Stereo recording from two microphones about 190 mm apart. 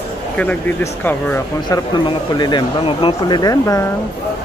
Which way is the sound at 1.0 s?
10° left (ahead or behind).